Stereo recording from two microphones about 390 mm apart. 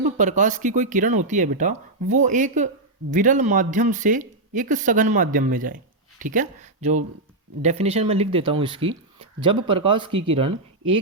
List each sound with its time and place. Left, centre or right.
0.2 s speech: centre